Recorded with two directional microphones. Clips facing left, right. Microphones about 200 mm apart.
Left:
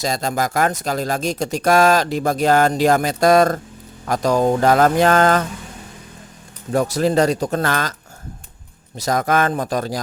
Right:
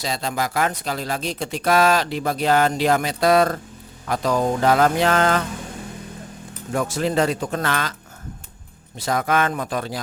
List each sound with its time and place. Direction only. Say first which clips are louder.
0.0 s speech: left 4 dB; 45° left (ahead or behind)
6.7 s speech: left 4 dB; 40° left (ahead or behind)
9.0 s speech: left 3 dB; 40° left (ahead or behind)